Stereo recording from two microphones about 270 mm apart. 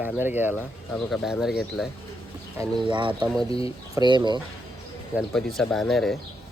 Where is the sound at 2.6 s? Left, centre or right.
Centre.